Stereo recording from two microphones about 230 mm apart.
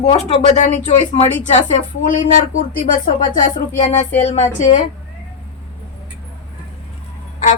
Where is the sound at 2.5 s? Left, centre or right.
Left.